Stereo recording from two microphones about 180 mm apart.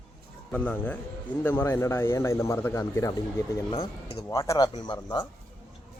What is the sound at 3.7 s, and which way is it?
Speech, 35° left (ahead or behind).